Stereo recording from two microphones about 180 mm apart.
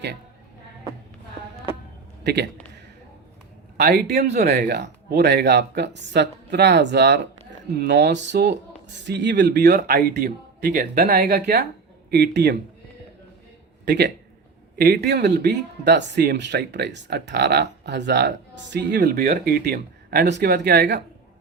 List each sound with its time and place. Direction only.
2.2 s a man's voice: 70° right (ahead or behind)
3.8 s speech: 60° right (ahead or behind)
13.8 s speech: 70° right (ahead or behind)